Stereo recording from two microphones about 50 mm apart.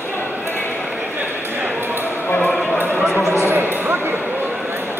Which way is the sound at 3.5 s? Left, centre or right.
Right.